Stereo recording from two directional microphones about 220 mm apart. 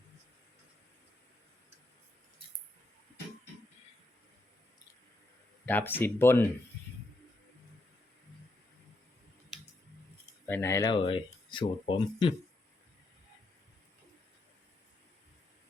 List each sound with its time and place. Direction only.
5.6 s speech: 10° left (ahead or behind)
10.4 s speech: 10° left (ahead or behind)